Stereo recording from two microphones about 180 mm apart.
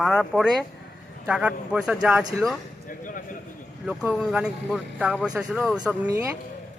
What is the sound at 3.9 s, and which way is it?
Speech, 5° right (ahead or behind).